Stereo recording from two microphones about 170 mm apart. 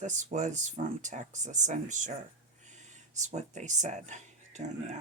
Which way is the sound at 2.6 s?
45° right (ahead or behind).